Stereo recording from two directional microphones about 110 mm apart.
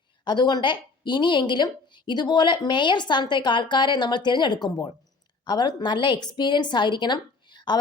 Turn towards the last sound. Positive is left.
turn(degrees=45)  # may be behind; listen again after turning